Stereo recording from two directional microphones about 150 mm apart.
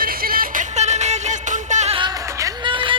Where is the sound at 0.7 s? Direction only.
50° right (ahead or behind).